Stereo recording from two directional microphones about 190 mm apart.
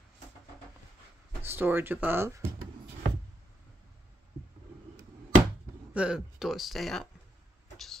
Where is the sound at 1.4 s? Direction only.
10° right (ahead or behind).